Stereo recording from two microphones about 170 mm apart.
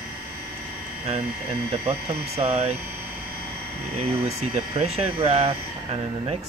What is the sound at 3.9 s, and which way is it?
Speech, 35° right (ahead or behind).